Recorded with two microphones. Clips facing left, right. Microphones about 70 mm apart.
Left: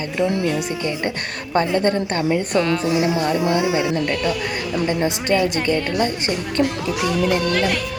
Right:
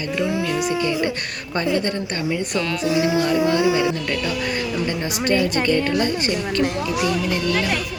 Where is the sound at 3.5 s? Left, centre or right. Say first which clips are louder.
Right 1 dB; left.